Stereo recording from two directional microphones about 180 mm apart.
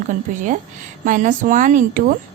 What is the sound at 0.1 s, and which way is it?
A woman's voice, 45° right (ahead or behind).